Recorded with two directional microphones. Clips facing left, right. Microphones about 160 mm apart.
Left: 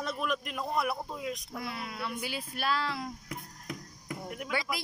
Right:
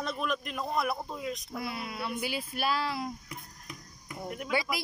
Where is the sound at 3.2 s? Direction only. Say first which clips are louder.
Left 4 dB; 90° left.